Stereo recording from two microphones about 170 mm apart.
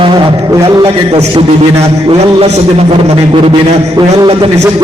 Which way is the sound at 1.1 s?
35° right (ahead or behind).